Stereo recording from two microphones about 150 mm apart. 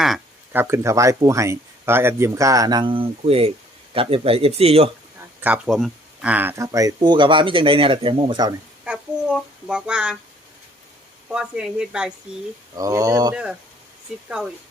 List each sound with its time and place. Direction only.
0.5 s speech: 15° right (ahead or behind); by 4.9 s 40° right (ahead or behind)
5.4 s speech: 5° right (ahead or behind); by 8.5 s 30° right (ahead or behind)
8.8 s speech: 5° right (ahead or behind)
11.3 s speech: 5° right (ahead or behind)
12.7 s speech: 25° right (ahead or behind)
13.3 s speech: 5° right (ahead or behind)